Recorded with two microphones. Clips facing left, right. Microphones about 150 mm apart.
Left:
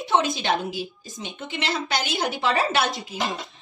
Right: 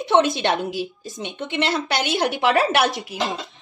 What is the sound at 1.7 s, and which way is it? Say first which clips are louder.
A woman's voice: right 4 dB; 65° right (ahead or behind).